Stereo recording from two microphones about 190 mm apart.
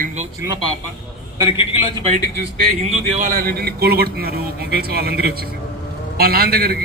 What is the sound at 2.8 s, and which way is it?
A man's voice, 45° right (ahead or behind).